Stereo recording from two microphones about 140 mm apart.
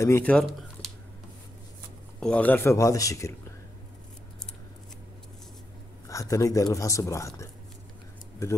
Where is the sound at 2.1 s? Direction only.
10° left (ahead or behind).